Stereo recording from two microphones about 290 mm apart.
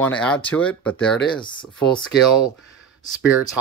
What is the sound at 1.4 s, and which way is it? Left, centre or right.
Speech, centre.